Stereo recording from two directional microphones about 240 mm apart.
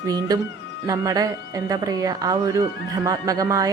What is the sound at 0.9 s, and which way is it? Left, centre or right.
A woman's voice, centre.